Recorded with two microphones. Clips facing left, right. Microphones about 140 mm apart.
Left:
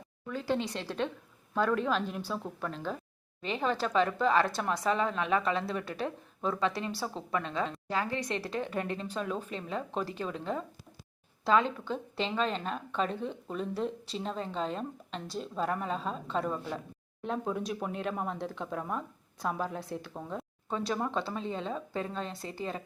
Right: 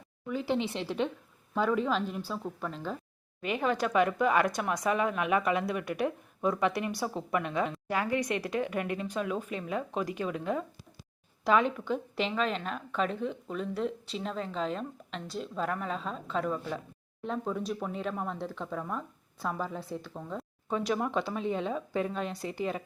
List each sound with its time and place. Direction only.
0.3 s a woman's voice: 15° right (ahead or behind)
3.8 s a woman's voice: 10° right (ahead or behind); by 20.4 s 5° left (ahead or behind)
20.7 s a woman's voice: 10° right (ahead or behind)
22.3 s a woman's voice: 25° left (ahead or behind)